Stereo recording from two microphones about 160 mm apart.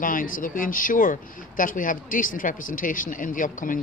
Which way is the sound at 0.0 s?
60° left (ahead or behind).